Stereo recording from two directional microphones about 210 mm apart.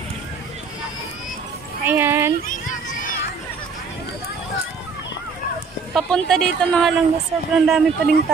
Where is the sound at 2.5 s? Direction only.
40° left (ahead or behind).